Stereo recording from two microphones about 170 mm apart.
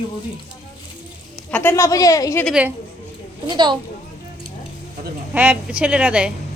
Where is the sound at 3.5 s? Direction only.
25° right (ahead or behind).